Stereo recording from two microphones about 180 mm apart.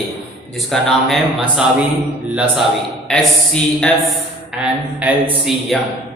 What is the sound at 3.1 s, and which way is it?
Speech, 5° left (ahead or behind).